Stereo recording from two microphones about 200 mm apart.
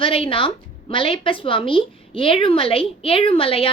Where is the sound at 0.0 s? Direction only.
25° left (ahead or behind).